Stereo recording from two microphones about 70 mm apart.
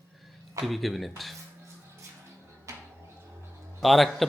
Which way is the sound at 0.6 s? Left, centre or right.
Centre.